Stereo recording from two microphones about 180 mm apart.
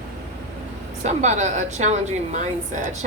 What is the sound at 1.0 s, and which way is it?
A woman's voice, 40° right (ahead or behind).